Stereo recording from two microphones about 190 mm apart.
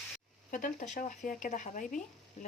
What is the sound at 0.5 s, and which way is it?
Speech, 45° left (ahead or behind).